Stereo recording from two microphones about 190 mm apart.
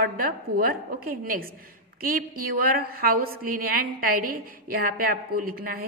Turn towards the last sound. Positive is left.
turn(degrees=-50)  # may be behind; listen again after turning